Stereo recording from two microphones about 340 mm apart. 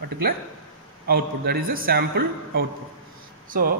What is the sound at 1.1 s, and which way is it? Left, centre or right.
A man's voice, right.